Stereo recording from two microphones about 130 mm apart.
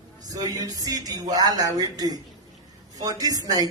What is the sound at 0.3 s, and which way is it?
A woman's voice, 30° right (ahead or behind).